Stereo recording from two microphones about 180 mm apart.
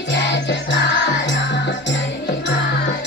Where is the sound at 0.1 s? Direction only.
80° left.